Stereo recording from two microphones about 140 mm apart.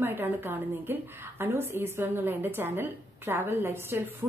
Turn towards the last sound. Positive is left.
turn(degrees=-15)  # may be behind; listen again after turning